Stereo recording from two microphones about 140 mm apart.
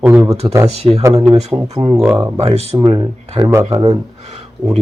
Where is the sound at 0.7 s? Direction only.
50° right (ahead or behind).